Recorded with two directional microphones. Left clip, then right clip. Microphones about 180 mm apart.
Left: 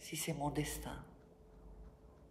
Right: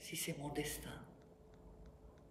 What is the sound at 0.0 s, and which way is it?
Speech, 15° left (ahead or behind).